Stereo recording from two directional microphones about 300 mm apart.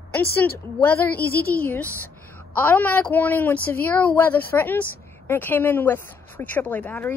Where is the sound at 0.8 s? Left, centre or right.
Centre.